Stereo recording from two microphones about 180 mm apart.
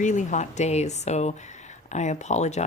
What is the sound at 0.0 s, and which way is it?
Speech, 45° left (ahead or behind).